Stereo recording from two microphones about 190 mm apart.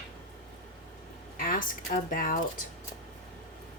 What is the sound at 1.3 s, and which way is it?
Speech, 50° left (ahead or behind).